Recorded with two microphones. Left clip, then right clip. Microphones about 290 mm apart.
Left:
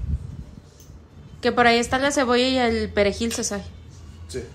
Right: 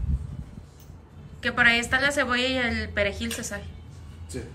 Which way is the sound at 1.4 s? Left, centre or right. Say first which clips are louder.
Left 3 dB; centre.